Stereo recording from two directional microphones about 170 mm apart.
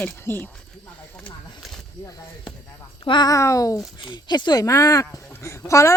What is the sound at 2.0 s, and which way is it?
Music, 20° left (ahead or behind).